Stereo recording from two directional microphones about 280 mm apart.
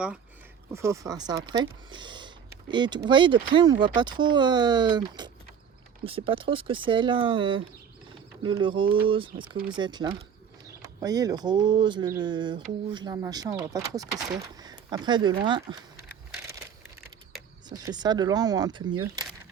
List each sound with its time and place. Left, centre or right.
0.7 s speech: centre
16.0 s a sound: centre
17.7 s speech: centre